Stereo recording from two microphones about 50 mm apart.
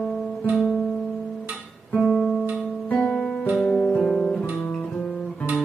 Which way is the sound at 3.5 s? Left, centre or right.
Left.